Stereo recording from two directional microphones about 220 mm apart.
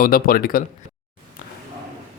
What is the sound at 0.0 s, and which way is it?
Speech, 40° left (ahead or behind).